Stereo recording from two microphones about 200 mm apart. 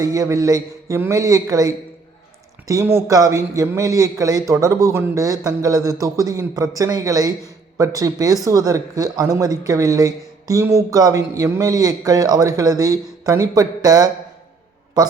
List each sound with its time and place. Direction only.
0.0 s speech: 15° right (ahead or behind)